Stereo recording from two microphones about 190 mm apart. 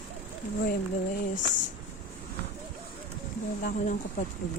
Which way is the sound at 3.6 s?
45° left (ahead or behind).